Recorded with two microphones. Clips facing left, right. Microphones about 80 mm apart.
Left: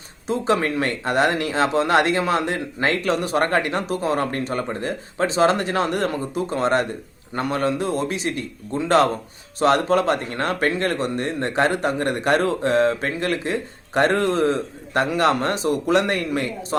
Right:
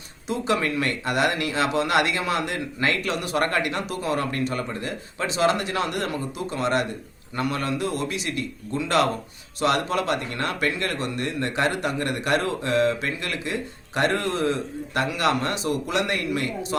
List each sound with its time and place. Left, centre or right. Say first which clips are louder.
0.3 s speech: left 3 dB; left